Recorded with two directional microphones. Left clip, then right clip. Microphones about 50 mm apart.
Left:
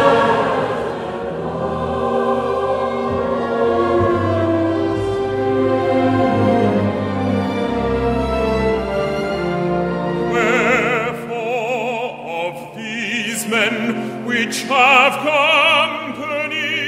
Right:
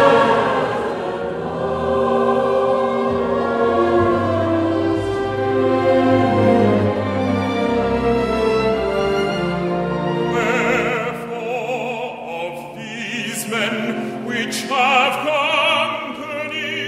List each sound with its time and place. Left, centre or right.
0.0 s music: centre
3.0 s music: centre
5.9 s music: centre
7.2 s music: right
8.4 s music: right
8.9 s music: right
10.3 s music: left
14.3 s opera: left